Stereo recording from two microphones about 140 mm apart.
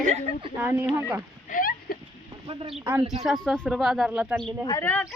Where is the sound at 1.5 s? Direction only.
85° left.